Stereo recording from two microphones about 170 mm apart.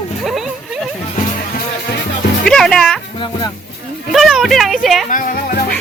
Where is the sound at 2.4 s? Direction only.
5° left (ahead or behind).